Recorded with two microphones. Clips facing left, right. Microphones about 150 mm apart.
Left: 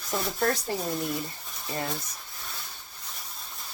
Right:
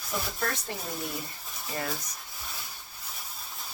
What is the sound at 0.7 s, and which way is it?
Speech, 35° left (ahead or behind).